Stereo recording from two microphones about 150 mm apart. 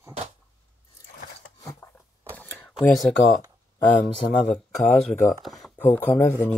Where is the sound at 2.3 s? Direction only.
Centre (ahead or behind).